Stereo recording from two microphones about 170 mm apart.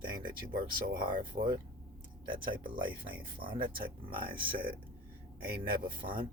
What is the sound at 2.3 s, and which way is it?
Speech, 55° right (ahead or behind).